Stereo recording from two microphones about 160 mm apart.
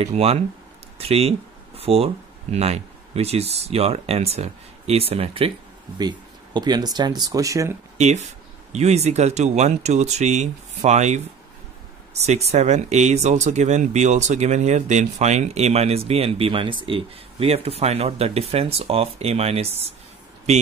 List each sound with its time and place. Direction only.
0.0 s speech: 40° right (ahead or behind); by 7.7 s 20° right (ahead or behind)
8.0 s speech: 45° right (ahead or behind)